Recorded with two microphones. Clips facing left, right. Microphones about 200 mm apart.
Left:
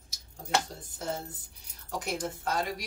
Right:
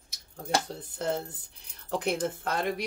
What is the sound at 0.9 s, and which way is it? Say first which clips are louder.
Speech: right 5 dB; 60° right (ahead or behind).